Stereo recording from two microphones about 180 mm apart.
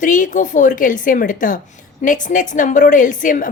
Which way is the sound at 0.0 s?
45° left (ahead or behind).